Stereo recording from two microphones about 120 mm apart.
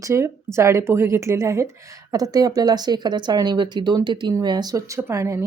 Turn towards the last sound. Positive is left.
turn(degrees=-25)  # may be behind; listen again after turning